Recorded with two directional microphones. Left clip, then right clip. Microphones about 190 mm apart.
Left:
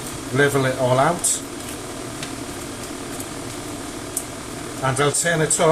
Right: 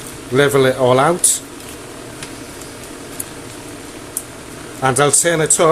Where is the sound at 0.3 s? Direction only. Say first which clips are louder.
Right 6 dB; 50° right (ahead or behind).